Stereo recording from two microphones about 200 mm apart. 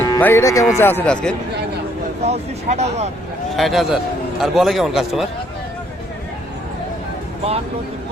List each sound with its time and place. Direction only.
0.0 s a man's voice: 10° left (ahead or behind)
2.2 s speech: 35° right (ahead or behind)
3.5 s a man's voice: centre (ahead or behind)